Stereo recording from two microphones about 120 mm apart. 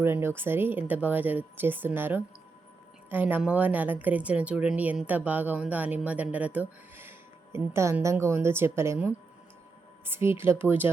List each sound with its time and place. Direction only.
0.0 s speech: 20° right (ahead or behind)
10.1 s speech: 20° right (ahead or behind)